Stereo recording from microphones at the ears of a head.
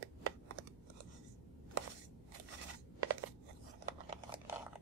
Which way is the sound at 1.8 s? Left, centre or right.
Right.